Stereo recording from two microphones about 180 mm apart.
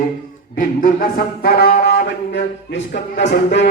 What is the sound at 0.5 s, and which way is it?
Wind instrument, 50° left (ahead or behind).